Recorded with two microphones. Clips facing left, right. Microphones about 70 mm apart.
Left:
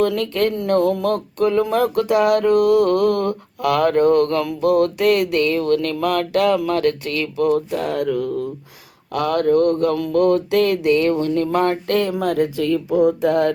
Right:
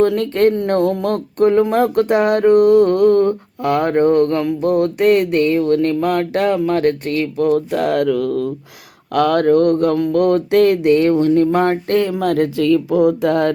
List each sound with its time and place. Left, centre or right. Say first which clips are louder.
0.0 s speech: right 5 dB; right
9.1 s speech: right 4 dB; right
12.2 s speech: right 3 dB; right